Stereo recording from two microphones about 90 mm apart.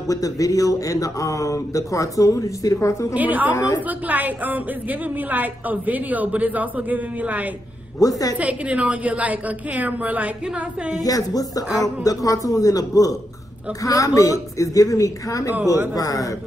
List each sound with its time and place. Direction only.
0.1 s speech: 40° left (ahead or behind)
3.2 s a woman's voice: 20° right (ahead or behind)
3.5 s a woman's voice: 45° left (ahead or behind)
3.8 s a woman's voice: 20° right (ahead or behind)
8.0 s speech: 40° left (ahead or behind)
8.4 s a woman's voice: 15° right (ahead or behind)
11.1 s speech: 40° left (ahead or behind)